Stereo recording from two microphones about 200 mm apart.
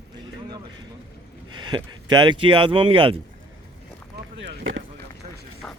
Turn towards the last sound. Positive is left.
turn(degrees=-75)  # may be behind; listen again after turning